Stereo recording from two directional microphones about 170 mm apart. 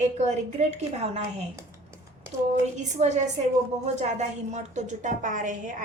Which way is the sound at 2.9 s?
45° right (ahead or behind).